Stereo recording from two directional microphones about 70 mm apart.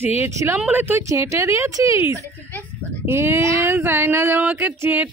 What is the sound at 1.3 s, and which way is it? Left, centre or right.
Speech, right.